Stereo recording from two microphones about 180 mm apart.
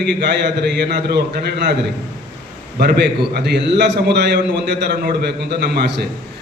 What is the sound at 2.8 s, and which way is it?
A man's voice, 65° right (ahead or behind).